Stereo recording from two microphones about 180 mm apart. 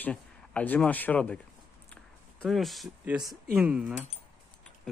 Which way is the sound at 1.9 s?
5° left (ahead or behind).